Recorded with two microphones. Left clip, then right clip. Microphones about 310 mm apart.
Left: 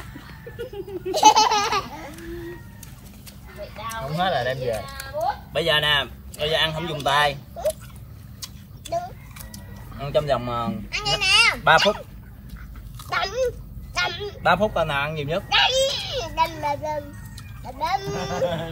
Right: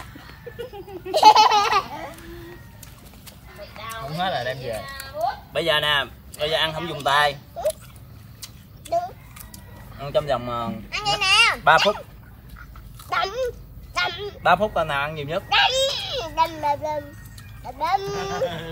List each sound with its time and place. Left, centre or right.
1.1 s laughter: centre
4.2 s speech: centre
5.2 s speech: centre
8.9 s a sound: centre
9.9 s speech: centre
13.1 s a sound: centre
13.9 s speech: centre